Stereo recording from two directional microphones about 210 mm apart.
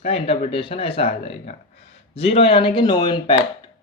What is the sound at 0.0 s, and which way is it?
Speech, 30° left (ahead or behind).